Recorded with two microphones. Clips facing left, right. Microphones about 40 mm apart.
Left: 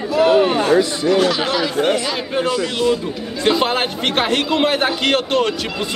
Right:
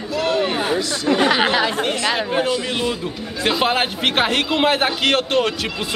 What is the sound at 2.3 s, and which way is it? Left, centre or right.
A man's voice, centre.